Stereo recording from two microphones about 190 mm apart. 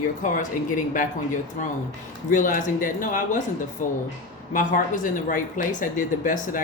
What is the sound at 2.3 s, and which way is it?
Speech, 45° left (ahead or behind).